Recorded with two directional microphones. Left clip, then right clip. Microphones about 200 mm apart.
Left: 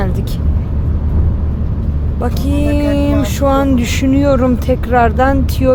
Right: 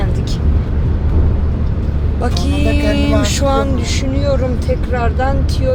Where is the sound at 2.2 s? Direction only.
15° left (ahead or behind).